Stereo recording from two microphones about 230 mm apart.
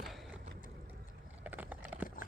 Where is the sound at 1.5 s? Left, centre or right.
Centre.